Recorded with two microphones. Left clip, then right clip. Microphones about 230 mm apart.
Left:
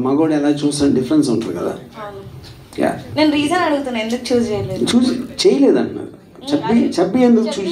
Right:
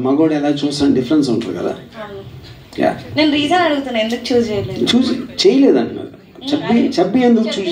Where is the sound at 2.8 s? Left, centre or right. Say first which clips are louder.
Right 1 dB; right.